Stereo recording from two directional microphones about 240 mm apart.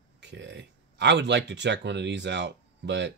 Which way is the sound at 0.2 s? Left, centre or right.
Right.